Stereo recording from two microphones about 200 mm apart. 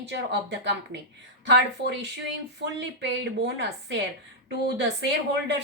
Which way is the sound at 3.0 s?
60° right (ahead or behind).